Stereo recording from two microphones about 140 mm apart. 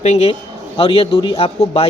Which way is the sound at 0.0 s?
50° left (ahead or behind).